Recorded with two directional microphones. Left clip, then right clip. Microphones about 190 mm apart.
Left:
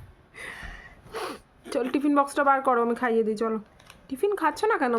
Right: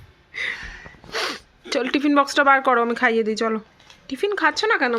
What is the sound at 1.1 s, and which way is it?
Speech, centre (ahead or behind).